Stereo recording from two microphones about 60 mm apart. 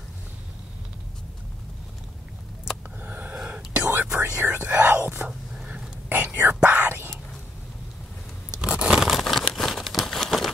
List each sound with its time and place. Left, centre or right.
3.0 s gasp: right
3.4 s whispering: centre
8.5 s tearing: centre
9.5 s crumpling: centre